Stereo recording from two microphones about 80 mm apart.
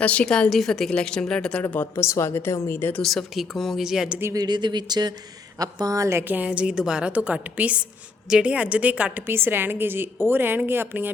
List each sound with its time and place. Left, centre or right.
0.0 s a woman's voice: centre
1.6 s a woman's voice: left
3.0 s speech: centre
4.4 s speech: right
5.5 s speech: right
6.2 s a woman's voice: centre